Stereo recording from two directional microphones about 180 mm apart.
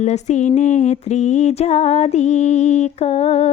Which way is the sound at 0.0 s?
40° left (ahead or behind).